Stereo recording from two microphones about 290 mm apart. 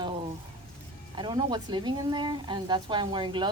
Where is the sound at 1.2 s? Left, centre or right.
Centre.